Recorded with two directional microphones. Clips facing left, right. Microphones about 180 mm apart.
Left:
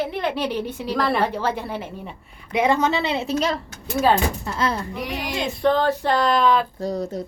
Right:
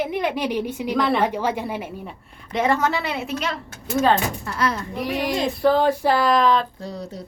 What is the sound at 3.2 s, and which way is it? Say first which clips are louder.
Speech: left 4 dB; 35° left (ahead or behind).